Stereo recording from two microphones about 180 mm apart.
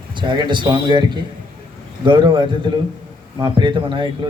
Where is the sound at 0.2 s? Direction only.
25° right (ahead or behind).